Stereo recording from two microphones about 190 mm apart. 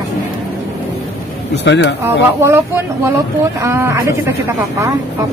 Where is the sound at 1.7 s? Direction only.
70° left (ahead or behind).